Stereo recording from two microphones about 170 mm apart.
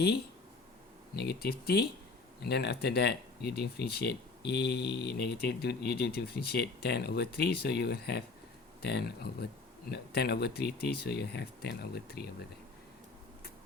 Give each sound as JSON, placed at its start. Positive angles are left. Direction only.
{"t": 1.1, "sound": "speech", "side_deg": 70}